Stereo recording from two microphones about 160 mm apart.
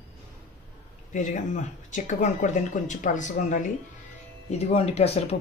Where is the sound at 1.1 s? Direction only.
55° left (ahead or behind).